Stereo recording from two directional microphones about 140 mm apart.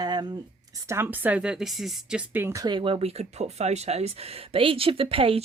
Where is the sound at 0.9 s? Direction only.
15° right (ahead or behind).